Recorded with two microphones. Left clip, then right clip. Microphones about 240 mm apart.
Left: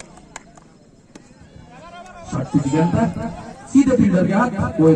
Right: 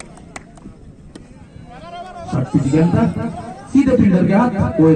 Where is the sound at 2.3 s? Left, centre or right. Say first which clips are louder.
Right 2 dB; left.